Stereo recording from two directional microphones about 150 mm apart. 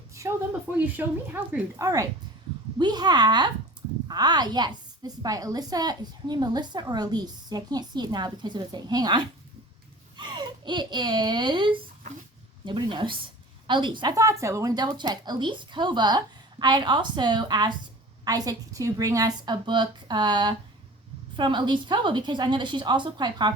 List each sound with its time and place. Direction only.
0.1 s a sound: 20° right (ahead or behind)
0.8 s speech: 10° right (ahead or behind)
2.7 s a woman's voice: 30° right (ahead or behind)